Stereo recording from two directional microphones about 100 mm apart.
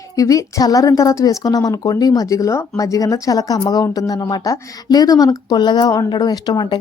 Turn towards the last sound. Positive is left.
turn(degrees=45)  # may be behind; listen again after turning